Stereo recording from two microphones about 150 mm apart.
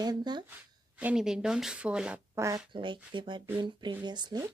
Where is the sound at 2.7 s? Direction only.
35° right (ahead or behind).